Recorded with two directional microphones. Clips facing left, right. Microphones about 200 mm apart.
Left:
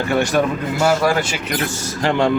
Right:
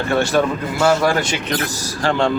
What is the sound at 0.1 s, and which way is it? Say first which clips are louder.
Speech: right 1 dB; 15° left (ahead or behind).